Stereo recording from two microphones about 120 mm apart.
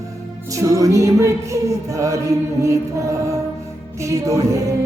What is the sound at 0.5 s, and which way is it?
Music, 30° right (ahead or behind).